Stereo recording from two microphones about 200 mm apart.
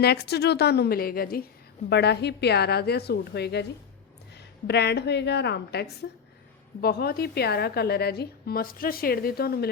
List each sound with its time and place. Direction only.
0.0 s a woman's voice: 55° left (ahead or behind)